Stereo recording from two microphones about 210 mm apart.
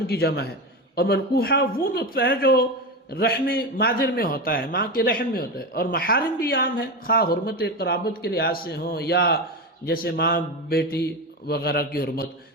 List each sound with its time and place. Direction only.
0.1 s a man's voice: 50° left (ahead or behind)